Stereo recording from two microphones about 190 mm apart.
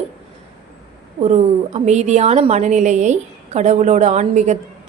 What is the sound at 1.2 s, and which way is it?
A woman's voice, 35° right (ahead or behind).